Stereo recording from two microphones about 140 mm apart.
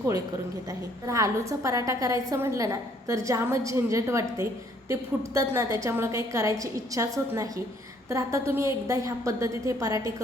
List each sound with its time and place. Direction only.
0.7 s a woman's voice: 25° right (ahead or behind)